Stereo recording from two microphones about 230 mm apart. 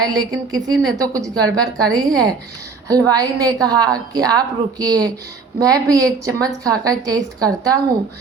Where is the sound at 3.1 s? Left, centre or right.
Centre.